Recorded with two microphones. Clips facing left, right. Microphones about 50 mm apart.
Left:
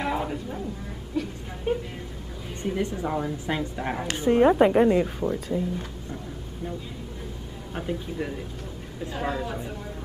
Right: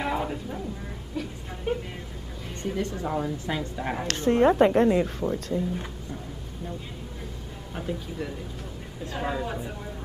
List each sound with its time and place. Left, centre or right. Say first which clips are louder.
0.0 s music: left 1 dB; centre
1.1 s speech: left 4 dB; centre
2.6 s speech: left 2 dB; centre
3.8 s speech: right 1 dB; centre
7.7 s speech: left 2 dB; centre
9.1 s speech: even; centre